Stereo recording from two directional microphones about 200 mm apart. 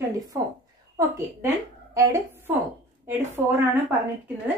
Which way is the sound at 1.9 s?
15° right (ahead or behind).